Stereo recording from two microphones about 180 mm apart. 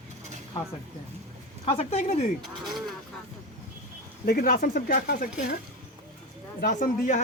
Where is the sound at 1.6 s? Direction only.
35° left (ahead or behind).